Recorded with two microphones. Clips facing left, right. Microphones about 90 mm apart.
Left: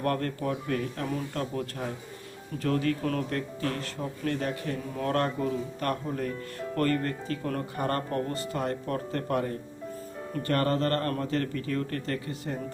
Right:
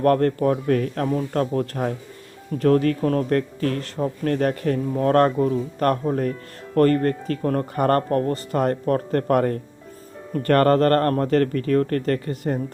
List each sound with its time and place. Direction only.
0.0 s speech: 45° right (ahead or behind)
3.2 s speech: 50° right (ahead or behind)